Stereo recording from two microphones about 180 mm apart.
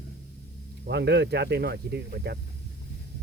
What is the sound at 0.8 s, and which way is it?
Speech, 70° right (ahead or behind).